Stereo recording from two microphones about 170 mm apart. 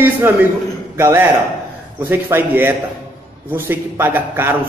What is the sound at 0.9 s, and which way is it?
A man's voice, 15° right (ahead or behind).